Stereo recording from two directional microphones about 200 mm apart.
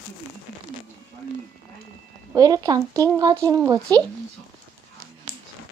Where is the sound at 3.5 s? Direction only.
15° right (ahead or behind).